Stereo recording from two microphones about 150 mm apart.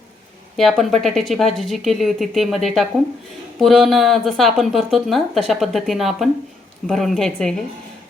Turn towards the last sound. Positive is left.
turn(degrees=5)  # may be behind; listen again after turning